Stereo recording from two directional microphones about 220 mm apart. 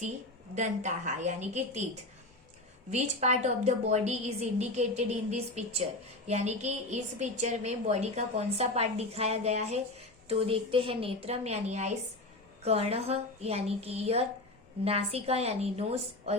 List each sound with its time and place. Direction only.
0.5 s a woman's voice: 35° right (ahead or behind)
2.9 s a woman's voice: 30° right (ahead or behind)